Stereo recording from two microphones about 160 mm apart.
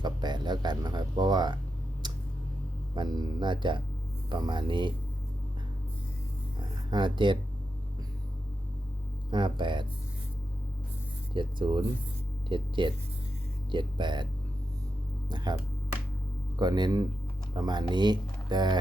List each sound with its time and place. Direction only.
0.0 s a sound: 25° right (ahead or behind)
2.9 s speech: 30° right (ahead or behind)
6.9 s speech: 30° right (ahead or behind)
9.3 s speech: 30° right (ahead or behind)
11.3 s speech: 30° right (ahead or behind)
15.3 s speech: 25° right (ahead or behind)
16.6 s speech: 25° right (ahead or behind)